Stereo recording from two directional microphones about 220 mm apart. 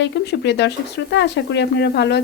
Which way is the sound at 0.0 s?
50° left (ahead or behind).